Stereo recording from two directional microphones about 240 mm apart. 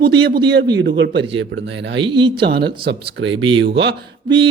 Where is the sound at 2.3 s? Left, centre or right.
Right.